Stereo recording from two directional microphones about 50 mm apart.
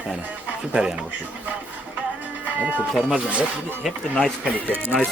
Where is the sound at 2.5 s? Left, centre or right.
Right.